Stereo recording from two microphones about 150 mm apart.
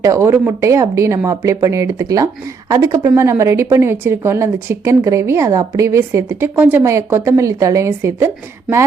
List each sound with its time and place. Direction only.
0.0 s a woman's voice: 20° right (ahead or behind)